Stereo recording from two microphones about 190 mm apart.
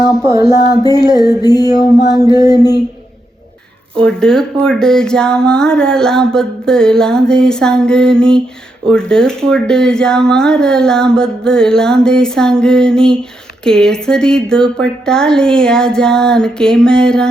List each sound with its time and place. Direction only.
0.3 s music: 20° left (ahead or behind)
4.0 s speech: 5° left (ahead or behind)